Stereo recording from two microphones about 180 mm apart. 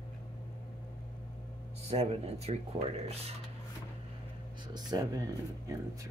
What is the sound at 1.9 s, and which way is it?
Speech, 35° right (ahead or behind).